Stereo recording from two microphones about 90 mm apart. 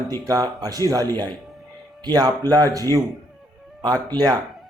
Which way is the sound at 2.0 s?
45° right (ahead or behind).